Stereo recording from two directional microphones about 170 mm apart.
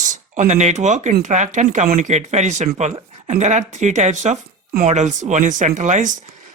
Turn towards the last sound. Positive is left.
turn(degrees=-45)  # may be behind; listen again after turning